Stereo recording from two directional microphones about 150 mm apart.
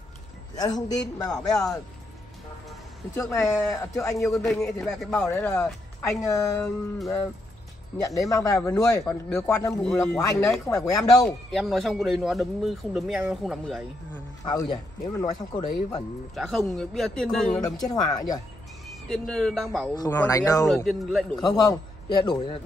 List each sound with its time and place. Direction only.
0.6 s speech: 25° left (ahead or behind)
3.2 s speech: 20° left (ahead or behind)
4.3 s speech: 5° left (ahead or behind)
5.1 s speech: 20° left (ahead or behind)
8.0 s speech: 20° left (ahead or behind)
11.5 s speech: centre (ahead or behind)
14.4 s speech: 25° left (ahead or behind)
16.3 s speech: centre (ahead or behind)
17.7 s speech: 25° left (ahead or behind)
19.0 s speech: 5° left (ahead or behind)
20.1 s speech: 20° left (ahead or behind)
20.6 s speech: 5° left (ahead or behind)
21.4 s speech: 25° left (ahead or behind)